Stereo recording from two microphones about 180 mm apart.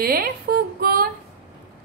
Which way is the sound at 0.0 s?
55° right (ahead or behind).